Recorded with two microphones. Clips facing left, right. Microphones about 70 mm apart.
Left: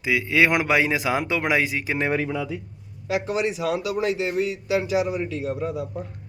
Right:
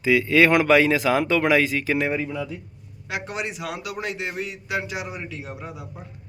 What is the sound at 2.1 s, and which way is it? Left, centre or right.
Speech, left.